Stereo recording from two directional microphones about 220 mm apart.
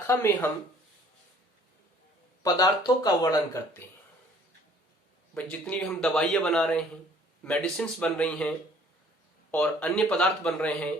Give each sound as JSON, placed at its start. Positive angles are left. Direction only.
{"t": 0.1, "sound": "speech", "side_deg": 10}
{"t": 2.4, "sound": "speech", "side_deg": 15}
{"t": 5.3, "sound": "speech", "side_deg": 5}